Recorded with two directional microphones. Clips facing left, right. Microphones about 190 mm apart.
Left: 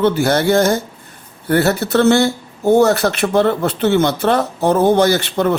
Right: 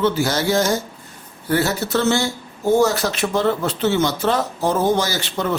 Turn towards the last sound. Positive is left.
turn(degrees=60)  # may be behind; listen again after turning